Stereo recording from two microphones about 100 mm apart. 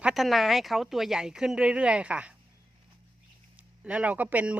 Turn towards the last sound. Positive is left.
turn(degrees=-15)  # may be behind; listen again after turning